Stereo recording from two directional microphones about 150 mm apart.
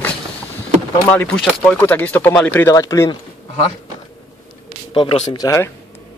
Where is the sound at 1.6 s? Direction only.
10° left (ahead or behind).